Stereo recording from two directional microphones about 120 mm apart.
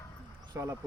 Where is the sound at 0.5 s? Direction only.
25° right (ahead or behind).